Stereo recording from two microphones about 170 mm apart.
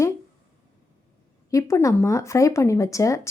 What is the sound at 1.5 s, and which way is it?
Speech, 20° left (ahead or behind).